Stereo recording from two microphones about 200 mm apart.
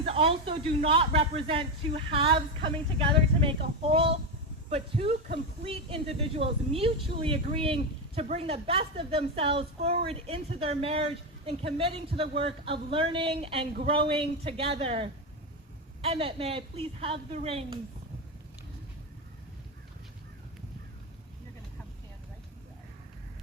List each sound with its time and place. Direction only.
0.0 s a woman's voice: 30° right (ahead or behind)